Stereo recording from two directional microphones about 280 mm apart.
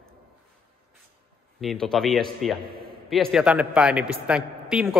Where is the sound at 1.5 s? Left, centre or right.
Centre.